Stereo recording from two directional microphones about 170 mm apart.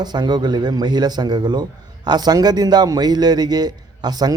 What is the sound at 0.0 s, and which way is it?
A man's voice, 25° right (ahead or behind).